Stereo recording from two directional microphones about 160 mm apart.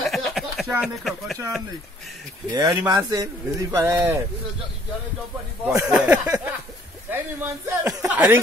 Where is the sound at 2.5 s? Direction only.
25° right (ahead or behind).